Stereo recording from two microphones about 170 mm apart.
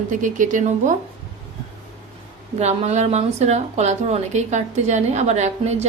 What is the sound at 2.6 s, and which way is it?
A woman's voice, 40° right (ahead or behind).